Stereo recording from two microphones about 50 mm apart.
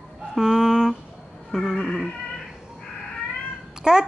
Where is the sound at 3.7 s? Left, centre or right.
Centre.